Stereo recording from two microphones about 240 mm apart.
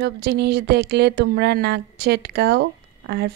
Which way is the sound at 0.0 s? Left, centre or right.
Right.